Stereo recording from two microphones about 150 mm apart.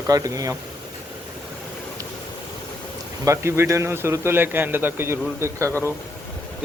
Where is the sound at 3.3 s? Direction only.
20° right (ahead or behind).